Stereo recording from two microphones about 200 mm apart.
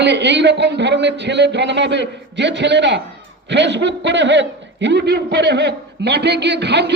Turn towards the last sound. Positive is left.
turn(degrees=-60)  # may be behind; listen again after turning